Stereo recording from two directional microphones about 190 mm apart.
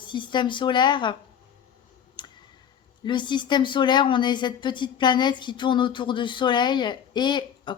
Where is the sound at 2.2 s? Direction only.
25° left (ahead or behind).